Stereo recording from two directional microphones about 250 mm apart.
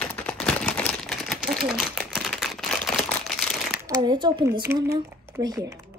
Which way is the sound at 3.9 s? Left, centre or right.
Centre.